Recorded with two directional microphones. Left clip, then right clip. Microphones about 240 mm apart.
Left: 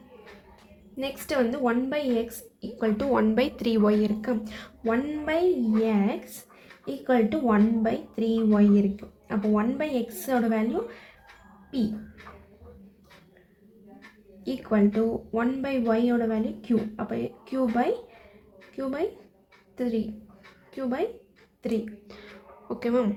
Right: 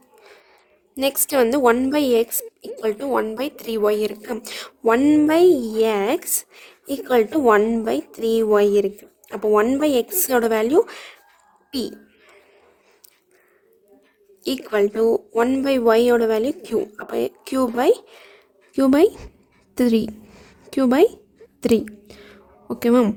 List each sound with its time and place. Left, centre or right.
0.9 s a woman's voice: right
14.4 s a woman's voice: right
22.0 s a sound: right
22.7 s speech: right